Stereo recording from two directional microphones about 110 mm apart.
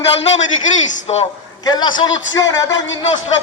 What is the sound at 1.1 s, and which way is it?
Speech, 60° left (ahead or behind).